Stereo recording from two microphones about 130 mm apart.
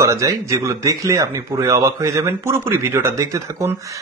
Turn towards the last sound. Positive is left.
turn(degrees=-25)  # may be behind; listen again after turning